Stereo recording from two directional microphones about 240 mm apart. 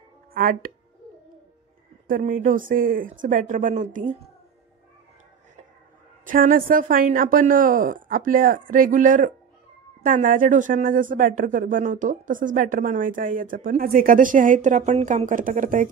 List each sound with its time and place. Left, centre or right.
0.3 s speech: right
2.0 s speech: right
6.2 s speech: right